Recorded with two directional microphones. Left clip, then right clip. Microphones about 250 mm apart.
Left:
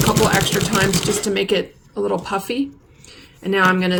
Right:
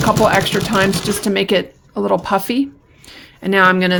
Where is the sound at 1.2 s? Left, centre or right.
Right.